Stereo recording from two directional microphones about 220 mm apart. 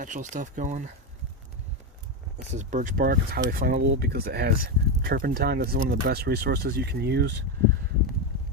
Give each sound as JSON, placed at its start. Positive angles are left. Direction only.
{"t": 0.0, "sound": "speech", "side_deg": -35}
{"t": 2.5, "sound": "speech", "side_deg": -35}